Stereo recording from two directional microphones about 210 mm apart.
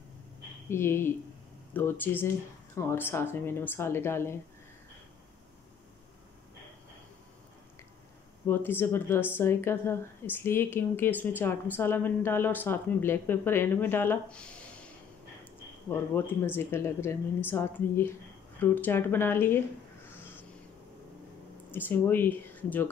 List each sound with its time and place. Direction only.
0.7 s a woman's voice: 10° left (ahead or behind)
8.5 s a woman's voice: 10° left (ahead or behind)
15.9 s a woman's voice: 10° left (ahead or behind)
21.6 s speech: 10° left (ahead or behind)